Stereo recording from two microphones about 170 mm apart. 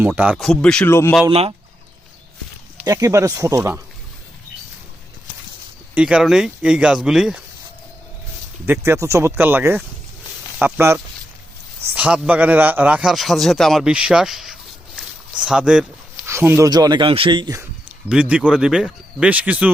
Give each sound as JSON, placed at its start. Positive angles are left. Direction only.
{"t": 0.1, "sound": "speech", "side_deg": -5}
{"t": 1.3, "sound": "speech", "side_deg": -35}
{"t": 2.8, "sound": "speech", "side_deg": -20}
{"t": 5.9, "sound": "speech", "side_deg": -5}
{"t": 8.6, "sound": "a man's voice", "side_deg": -15}
{"t": 16.2, "sound": "speech", "side_deg": -15}
{"t": 16.6, "sound": "speech", "side_deg": -25}
{"t": 17.6, "sound": "speech", "side_deg": -10}